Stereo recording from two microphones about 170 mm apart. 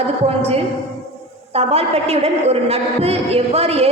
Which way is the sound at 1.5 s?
35° right (ahead or behind).